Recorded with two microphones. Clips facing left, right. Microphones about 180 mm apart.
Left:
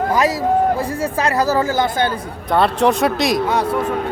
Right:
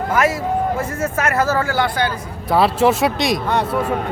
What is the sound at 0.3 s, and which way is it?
Speech, 35° left (ahead or behind).